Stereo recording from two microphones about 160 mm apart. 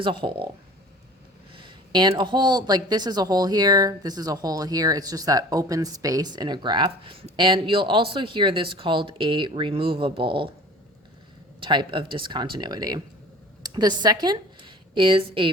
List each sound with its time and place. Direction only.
0.0 s speech: 30° right (ahead or behind)
1.5 s speech: 30° right (ahead or behind)
11.6 s speech: 30° right (ahead or behind)